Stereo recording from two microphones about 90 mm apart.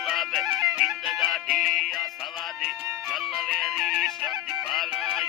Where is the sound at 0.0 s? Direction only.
Centre (ahead or behind).